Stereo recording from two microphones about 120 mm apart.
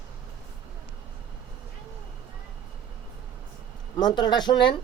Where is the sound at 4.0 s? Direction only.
40° left (ahead or behind).